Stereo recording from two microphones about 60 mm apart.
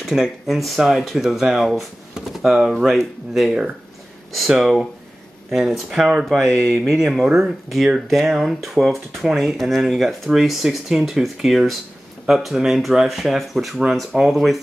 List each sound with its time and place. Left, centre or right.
0.0 s speech: centre